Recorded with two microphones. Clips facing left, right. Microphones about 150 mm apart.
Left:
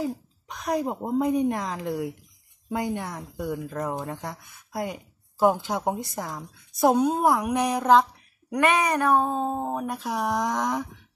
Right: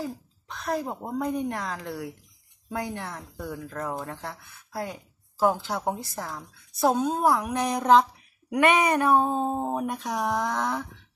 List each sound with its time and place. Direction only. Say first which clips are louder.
0.0 s speech: left 4 dB; 15° left (ahead or behind)